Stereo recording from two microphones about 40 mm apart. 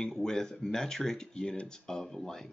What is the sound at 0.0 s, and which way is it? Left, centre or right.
Speech, centre.